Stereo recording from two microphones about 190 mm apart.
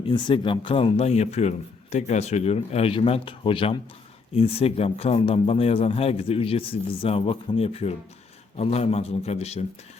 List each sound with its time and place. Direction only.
0.0 s speech: 25° left (ahead or behind)